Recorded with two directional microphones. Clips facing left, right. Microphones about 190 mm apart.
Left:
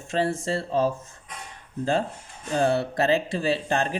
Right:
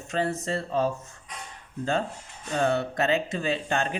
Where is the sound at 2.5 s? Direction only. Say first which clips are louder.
Left 2 dB; 35° left (ahead or behind).